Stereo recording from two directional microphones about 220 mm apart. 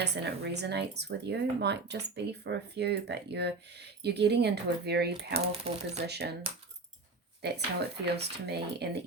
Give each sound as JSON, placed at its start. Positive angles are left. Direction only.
{"t": 0.0, "sound": "speech", "side_deg": -50}
{"t": 5.7, "sound": "speech", "side_deg": -25}
{"t": 6.1, "sound": "speech", "side_deg": -50}
{"t": 7.4, "sound": "speech", "side_deg": -50}